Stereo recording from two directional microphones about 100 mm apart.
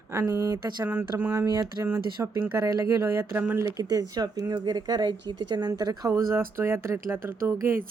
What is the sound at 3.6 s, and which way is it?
Speech, 35° right (ahead or behind).